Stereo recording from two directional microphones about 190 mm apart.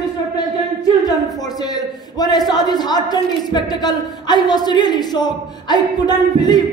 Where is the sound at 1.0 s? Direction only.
20° left (ahead or behind).